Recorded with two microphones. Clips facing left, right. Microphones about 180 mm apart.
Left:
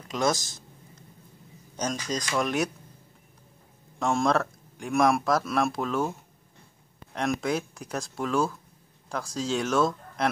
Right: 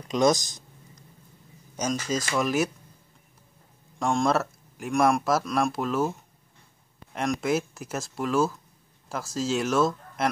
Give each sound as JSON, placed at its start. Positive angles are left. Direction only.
{"t": 0.1, "sound": "a sound", "side_deg": -20}
{"t": 1.8, "sound": "speech", "side_deg": -5}
{"t": 4.0, "sound": "speech", "side_deg": 0}
{"t": 7.2, "sound": "speech", "side_deg": -5}